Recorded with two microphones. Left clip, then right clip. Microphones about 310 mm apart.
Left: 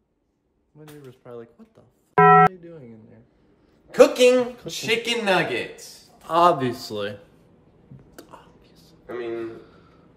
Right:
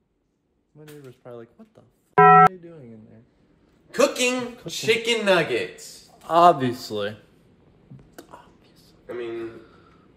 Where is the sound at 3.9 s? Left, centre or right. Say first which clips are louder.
Left 6 dB; left.